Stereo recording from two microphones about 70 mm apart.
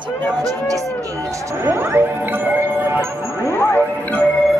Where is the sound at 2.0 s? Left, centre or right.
Right.